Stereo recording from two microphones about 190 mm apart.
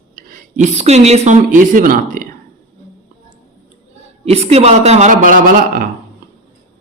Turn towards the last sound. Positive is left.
turn(degrees=-45)  # may be behind; listen again after turning